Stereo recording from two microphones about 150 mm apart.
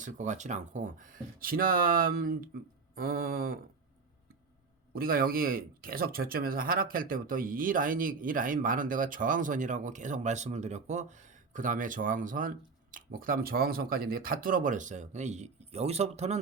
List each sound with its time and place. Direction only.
0.0 s speech: 55° right (ahead or behind); by 2.5 s 80° right
2.9 s mantra: 80° right
4.9 s speech: 75° right (ahead or behind); by 11.0 s 50° right (ahead or behind)
11.5 s speech: 60° right (ahead or behind)